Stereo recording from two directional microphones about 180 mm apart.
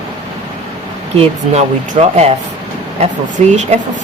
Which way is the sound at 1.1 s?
35° right (ahead or behind).